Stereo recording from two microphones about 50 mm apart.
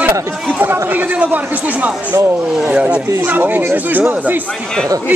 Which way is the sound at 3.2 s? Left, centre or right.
Right.